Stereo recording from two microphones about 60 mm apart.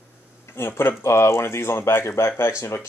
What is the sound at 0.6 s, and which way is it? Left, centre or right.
Speech, left.